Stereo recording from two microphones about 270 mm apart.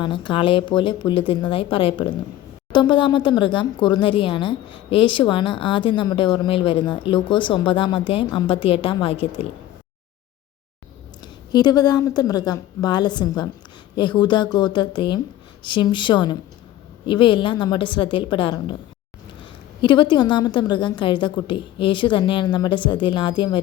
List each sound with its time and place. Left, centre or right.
0.0 s a woman's voice: centre
11.2 s speech: centre
19.8 s speech: centre